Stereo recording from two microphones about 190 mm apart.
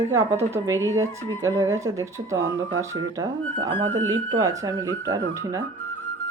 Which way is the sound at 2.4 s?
90° right.